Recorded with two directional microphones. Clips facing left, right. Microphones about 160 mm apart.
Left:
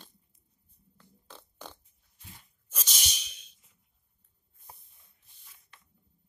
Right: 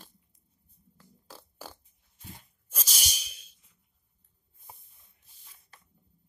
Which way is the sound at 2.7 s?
10° right (ahead or behind).